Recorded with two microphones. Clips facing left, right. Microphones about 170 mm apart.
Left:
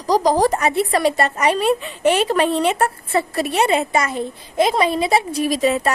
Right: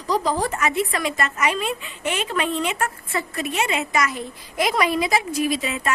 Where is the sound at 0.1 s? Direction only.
40° left (ahead or behind).